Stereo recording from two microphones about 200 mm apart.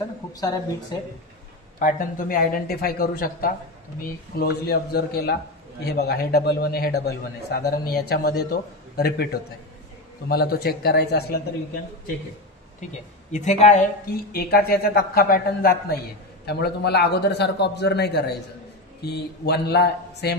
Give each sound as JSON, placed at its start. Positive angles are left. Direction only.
{"t": 0.3, "sound": "speech", "side_deg": 20}
{"t": 1.8, "sound": "speech", "side_deg": 45}
{"t": 13.3, "sound": "speech", "side_deg": 35}
{"t": 14.3, "sound": "a man's voice", "side_deg": 50}